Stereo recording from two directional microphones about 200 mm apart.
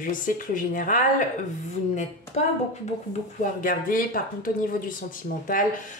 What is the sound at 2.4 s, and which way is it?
Speech, 35° left (ahead or behind).